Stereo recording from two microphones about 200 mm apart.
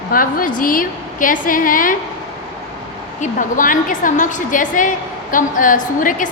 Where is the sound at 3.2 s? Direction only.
40° left (ahead or behind).